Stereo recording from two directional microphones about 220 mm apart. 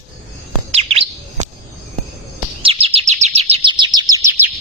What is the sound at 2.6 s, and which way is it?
Chirp, 25° right (ahead or behind).